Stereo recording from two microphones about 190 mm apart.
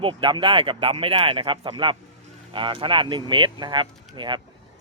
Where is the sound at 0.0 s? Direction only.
25° right (ahead or behind).